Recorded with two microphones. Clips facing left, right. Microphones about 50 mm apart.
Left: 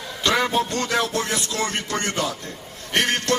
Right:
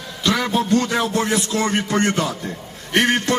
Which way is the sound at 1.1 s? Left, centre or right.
Right.